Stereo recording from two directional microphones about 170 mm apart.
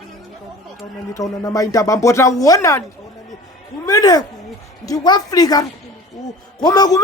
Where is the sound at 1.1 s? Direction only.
20° left (ahead or behind).